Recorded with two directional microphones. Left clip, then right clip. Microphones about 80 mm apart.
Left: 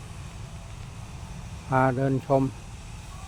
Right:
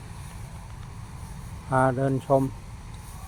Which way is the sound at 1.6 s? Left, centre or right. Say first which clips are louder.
Right 1 dB; left.